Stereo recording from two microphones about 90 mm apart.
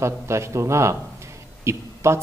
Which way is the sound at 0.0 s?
30° right (ahead or behind).